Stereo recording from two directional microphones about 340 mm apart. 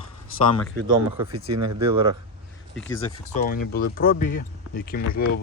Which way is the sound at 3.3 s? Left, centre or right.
Left.